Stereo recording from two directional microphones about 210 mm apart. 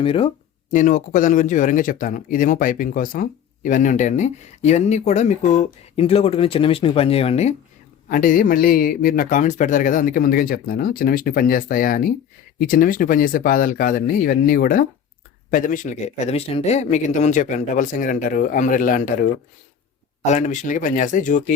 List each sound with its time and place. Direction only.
0.0 s speech: 25° left (ahead or behind)
0.7 s speech: 35° left (ahead or behind)
8.1 s a man's voice: 40° left (ahead or behind)